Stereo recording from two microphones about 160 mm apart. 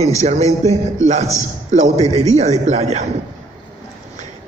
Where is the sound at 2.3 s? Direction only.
45° right (ahead or behind).